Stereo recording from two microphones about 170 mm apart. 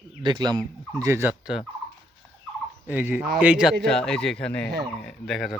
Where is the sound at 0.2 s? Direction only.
25° right (ahead or behind); by 1.6 s 5° right (ahead or behind).